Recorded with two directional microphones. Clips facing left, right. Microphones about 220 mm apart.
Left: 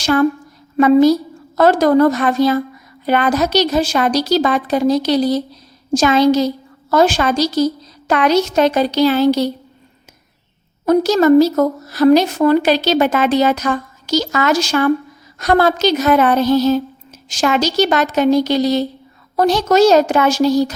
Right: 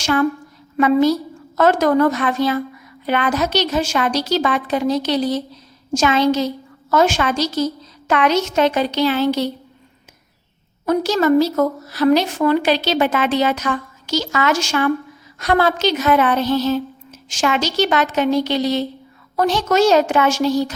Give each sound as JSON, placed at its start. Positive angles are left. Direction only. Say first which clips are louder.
{"t": 0.0, "sound": "a woman's voice", "louder": "left 4 dB", "side_deg": 40}
{"t": 10.8, "sound": "speech", "louder": "left 5 dB", "side_deg": 40}